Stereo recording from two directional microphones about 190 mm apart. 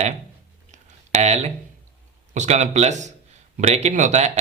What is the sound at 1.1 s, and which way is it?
Speech, 35° right (ahead or behind).